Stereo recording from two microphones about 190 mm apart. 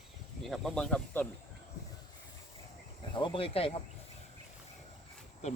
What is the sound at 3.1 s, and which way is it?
Speech, 25° left (ahead or behind).